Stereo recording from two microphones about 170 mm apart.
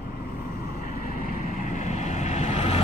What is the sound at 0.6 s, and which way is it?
Vehicle, 55° left (ahead or behind).